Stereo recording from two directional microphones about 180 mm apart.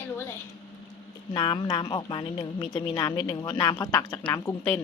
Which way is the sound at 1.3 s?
25° left (ahead or behind).